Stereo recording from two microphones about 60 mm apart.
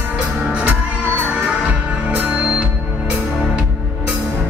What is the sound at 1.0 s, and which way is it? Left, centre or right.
Music, left.